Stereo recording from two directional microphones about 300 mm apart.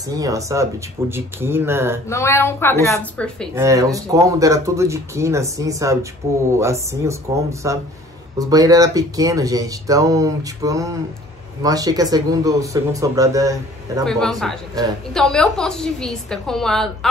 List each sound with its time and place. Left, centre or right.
0.0 s speech: centre
2.0 s a woman's voice: centre
3.5 s speech: centre
14.0 s a woman's voice: centre